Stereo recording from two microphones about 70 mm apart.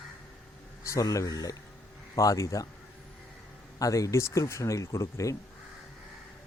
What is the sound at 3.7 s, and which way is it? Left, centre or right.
Speech, left.